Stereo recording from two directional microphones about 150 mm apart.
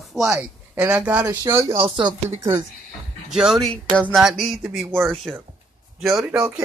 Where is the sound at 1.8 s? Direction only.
35° right (ahead or behind).